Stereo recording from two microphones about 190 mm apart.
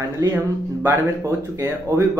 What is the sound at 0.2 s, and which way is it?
Speech, 15° right (ahead or behind).